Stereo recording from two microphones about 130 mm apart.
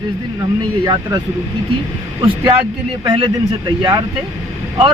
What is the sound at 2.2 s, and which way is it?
Speech, 40° right (ahead or behind).